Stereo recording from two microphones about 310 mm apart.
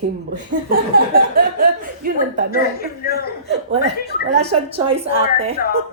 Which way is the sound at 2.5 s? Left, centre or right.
Left.